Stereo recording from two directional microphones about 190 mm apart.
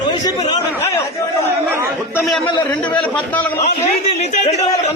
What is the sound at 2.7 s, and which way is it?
Speech, 5° left (ahead or behind).